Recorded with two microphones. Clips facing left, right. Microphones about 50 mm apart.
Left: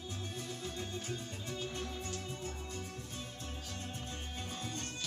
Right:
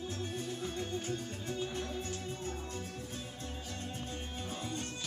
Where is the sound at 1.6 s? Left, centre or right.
Centre.